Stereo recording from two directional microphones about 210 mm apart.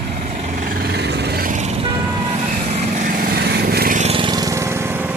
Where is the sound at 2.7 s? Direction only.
40° right (ahead or behind).